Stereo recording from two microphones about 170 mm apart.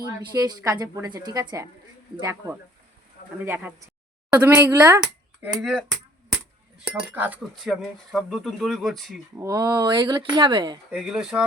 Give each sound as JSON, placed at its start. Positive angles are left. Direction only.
{"t": 0.3, "sound": "speech", "side_deg": -20}
{"t": 9.3, "sound": "speech", "side_deg": -20}
{"t": 10.9, "sound": "speech", "side_deg": -5}